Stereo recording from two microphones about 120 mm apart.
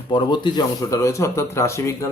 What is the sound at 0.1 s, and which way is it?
Speech, 40° left (ahead or behind).